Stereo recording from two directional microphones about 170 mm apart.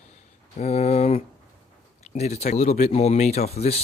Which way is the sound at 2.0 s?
40° left (ahead or behind).